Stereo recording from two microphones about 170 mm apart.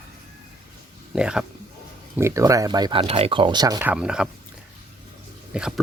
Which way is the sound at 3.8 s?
5° right (ahead or behind).